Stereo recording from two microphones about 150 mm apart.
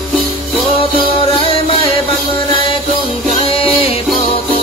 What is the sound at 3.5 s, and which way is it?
Music, 40° left (ahead or behind).